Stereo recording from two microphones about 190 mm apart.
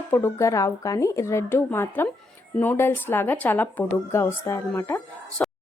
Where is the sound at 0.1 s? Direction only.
10° left (ahead or behind).